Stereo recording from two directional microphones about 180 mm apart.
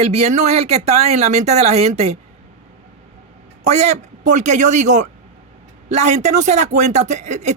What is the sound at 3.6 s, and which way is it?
Speech, 40° right (ahead or behind).